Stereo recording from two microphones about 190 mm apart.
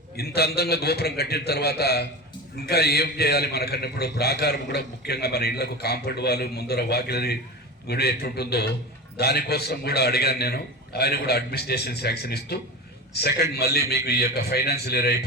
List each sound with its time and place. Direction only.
0.2 s a man's voice: 55° left (ahead or behind)